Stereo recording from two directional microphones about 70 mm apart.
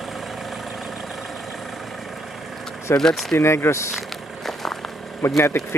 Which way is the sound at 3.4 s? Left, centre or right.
Left.